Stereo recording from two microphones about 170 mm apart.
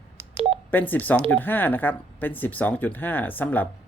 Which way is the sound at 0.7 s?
10° left (ahead or behind).